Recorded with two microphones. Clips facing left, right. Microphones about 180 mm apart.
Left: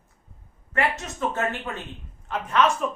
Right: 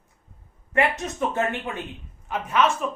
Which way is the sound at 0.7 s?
15° right (ahead or behind).